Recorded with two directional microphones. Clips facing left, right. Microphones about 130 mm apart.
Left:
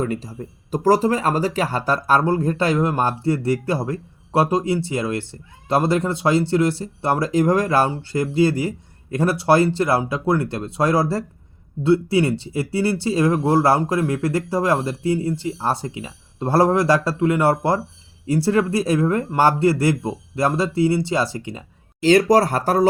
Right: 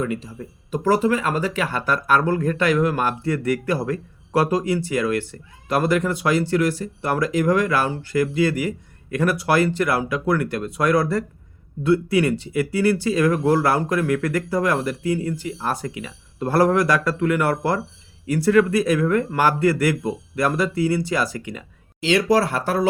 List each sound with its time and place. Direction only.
0.0 s speech: 40° left (ahead or behind)
22.0 s speech: 40° left (ahead or behind)